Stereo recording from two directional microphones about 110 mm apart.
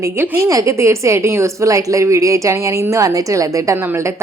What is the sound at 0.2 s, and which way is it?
A woman's voice, 30° right (ahead or behind).